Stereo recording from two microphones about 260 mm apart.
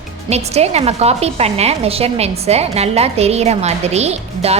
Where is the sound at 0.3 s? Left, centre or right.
Right.